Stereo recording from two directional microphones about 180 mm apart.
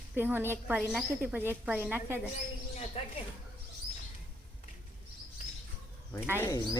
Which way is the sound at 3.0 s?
35° left (ahead or behind).